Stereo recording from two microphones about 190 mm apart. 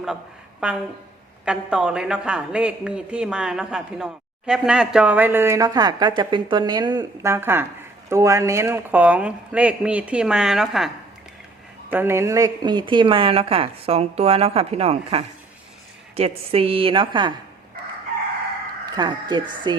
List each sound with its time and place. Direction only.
0.6 s a woman's voice: 5° right (ahead or behind); by 17.3 s 25° right (ahead or behind)
18.9 s a woman's voice: 25° right (ahead or behind)